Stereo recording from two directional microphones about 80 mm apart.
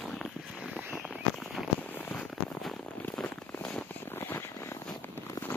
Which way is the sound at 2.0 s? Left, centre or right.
Left.